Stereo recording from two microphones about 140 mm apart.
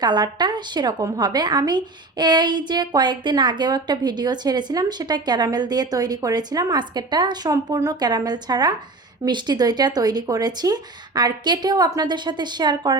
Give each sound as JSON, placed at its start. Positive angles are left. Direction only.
{"t": 0.0, "sound": "a woman's voice", "side_deg": -30}